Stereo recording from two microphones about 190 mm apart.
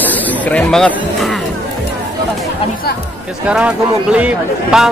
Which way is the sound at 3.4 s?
5° right (ahead or behind).